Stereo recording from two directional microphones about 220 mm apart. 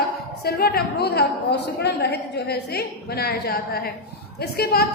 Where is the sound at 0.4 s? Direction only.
45° left (ahead or behind).